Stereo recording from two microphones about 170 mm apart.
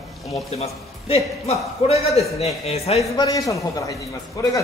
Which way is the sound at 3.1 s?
20° left (ahead or behind).